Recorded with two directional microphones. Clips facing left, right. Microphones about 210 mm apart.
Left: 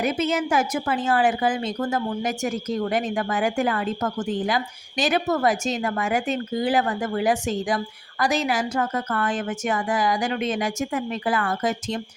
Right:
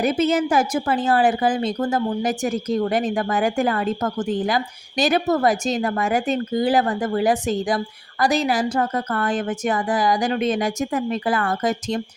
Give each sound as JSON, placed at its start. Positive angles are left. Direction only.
{"t": 0.0, "sound": "a woman's voice", "side_deg": -35}